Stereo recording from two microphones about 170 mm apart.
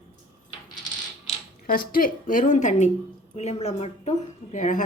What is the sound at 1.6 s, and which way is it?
A woman's voice, 60° left (ahead or behind).